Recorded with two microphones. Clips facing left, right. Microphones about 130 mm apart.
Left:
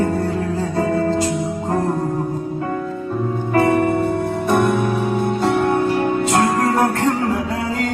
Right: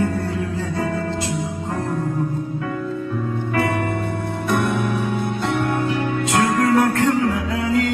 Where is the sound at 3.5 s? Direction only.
30° left (ahead or behind).